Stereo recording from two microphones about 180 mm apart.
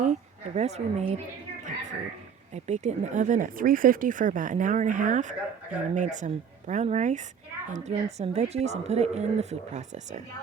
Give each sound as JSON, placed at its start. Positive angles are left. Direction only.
{"t": 0.0, "sound": "a woman's voice", "side_deg": -40}
{"t": 1.6, "sound": "a sound", "side_deg": -40}
{"t": 2.5, "sound": "a woman's voice", "side_deg": -40}